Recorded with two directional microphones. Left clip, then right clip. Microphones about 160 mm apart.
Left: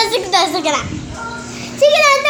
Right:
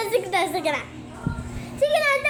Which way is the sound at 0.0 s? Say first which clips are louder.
Left 8 dB; 15° right (ahead or behind).